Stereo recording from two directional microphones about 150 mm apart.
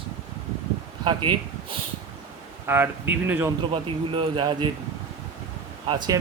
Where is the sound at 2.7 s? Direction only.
15° right (ahead or behind).